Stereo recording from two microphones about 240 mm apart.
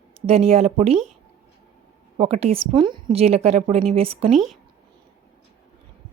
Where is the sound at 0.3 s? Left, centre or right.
Right.